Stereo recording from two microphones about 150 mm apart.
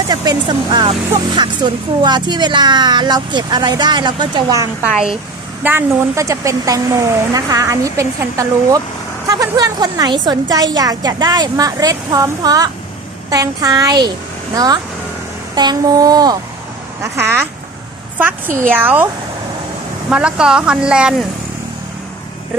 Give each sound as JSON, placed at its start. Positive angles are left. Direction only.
{"t": 0.1, "sound": "speech", "side_deg": -30}
{"t": 5.6, "sound": "speech", "side_deg": -15}
{"t": 18.7, "sound": "speech", "side_deg": -15}
{"t": 20.1, "sound": "speech", "side_deg": -5}